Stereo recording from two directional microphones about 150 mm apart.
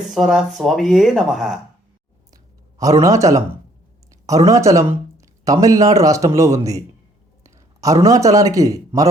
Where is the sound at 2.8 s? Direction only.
20° right (ahead or behind).